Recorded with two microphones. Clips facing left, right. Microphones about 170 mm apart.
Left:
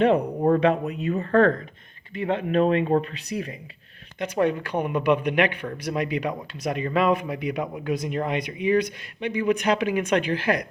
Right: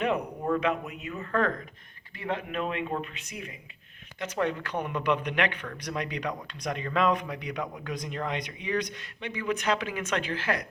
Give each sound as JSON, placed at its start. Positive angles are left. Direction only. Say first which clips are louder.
{"t": 0.0, "sound": "speech", "louder": "left 9 dB", "side_deg": 30}
{"t": 4.2, "sound": "speech", "louder": "left 6 dB", "side_deg": 15}